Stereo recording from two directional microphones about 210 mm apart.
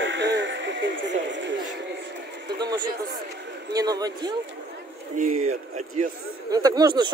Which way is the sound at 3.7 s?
20° right (ahead or behind).